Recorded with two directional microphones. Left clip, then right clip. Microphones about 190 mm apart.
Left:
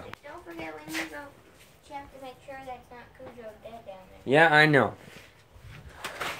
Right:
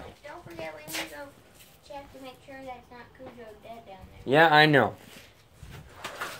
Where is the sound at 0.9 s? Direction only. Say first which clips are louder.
Left 1 dB; 60° right (ahead or behind).